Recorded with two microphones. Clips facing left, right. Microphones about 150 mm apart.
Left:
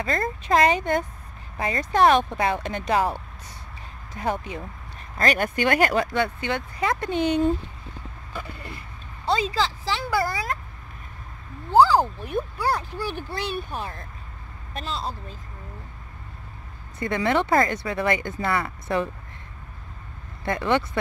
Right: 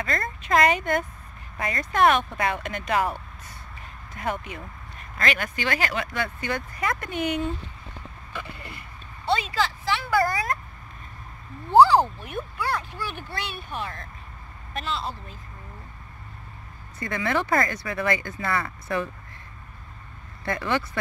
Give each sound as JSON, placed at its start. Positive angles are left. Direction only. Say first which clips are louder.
{"t": 0.0, "sound": "speech", "louder": "left 3 dB", "side_deg": 30}
{"t": 4.2, "sound": "speech", "louder": "left 3 dB", "side_deg": 30}
{"t": 5.1, "sound": "speech", "louder": "left 5 dB", "side_deg": 40}
{"t": 6.1, "sound": "speech", "louder": "left 4 dB", "side_deg": 25}
{"t": 8.3, "sound": "vehicle", "louder": "left 2 dB", "side_deg": 40}
{"t": 9.2, "sound": "speech", "louder": "left 1 dB", "side_deg": 35}
{"t": 12.3, "sound": "speech", "louder": "left 4 dB", "side_deg": 40}
{"t": 17.0, "sound": "speech", "louder": "left 4 dB", "side_deg": 20}
{"t": 20.4, "sound": "speech", "louder": "left 3 dB", "side_deg": 20}